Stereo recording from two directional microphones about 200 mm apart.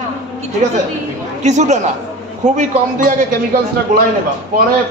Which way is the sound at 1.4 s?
35° right (ahead or behind).